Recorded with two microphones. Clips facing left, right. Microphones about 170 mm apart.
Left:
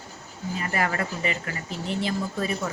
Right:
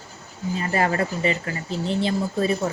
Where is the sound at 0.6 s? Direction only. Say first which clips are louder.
Right 5 dB; 30° right (ahead or behind).